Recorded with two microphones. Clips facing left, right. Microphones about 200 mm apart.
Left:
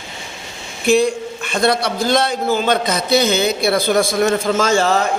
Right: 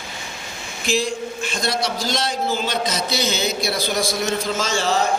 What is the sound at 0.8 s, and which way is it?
A man's voice, 60° left (ahead or behind).